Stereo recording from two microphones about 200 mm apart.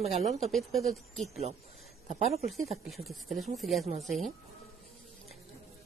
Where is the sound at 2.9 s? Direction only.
Centre (ahead or behind).